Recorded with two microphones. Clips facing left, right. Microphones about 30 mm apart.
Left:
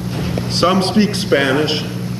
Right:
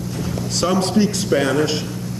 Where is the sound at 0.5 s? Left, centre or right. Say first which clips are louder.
Left 4 dB; left.